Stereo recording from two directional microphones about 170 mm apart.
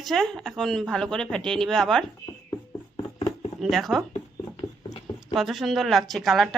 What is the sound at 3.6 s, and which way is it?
Speech, centre (ahead or behind).